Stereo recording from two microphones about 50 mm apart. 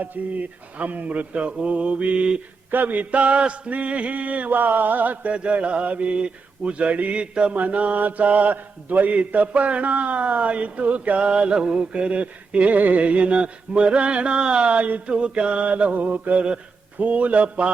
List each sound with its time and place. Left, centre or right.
0.0 s mantra: right
2.6 s a sound: right
5.3 s mantra: right